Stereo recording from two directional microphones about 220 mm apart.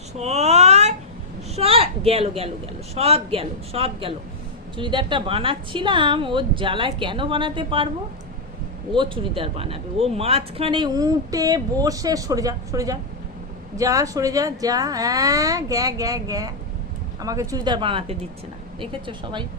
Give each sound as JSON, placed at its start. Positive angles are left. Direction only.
{"t": 0.2, "sound": "a sound", "side_deg": -30}
{"t": 2.9, "sound": "a woman's voice", "side_deg": -25}
{"t": 9.0, "sound": "a woman's voice", "side_deg": -25}